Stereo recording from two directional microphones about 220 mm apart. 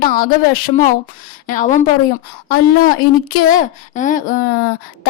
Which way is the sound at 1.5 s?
35° left (ahead or behind).